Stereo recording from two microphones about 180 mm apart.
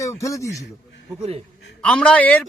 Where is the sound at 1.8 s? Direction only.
5° left (ahead or behind).